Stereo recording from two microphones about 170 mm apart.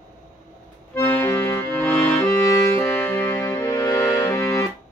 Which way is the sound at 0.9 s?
15° left (ahead or behind).